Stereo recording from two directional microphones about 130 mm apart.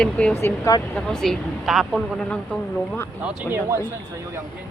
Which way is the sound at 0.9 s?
5° left (ahead or behind).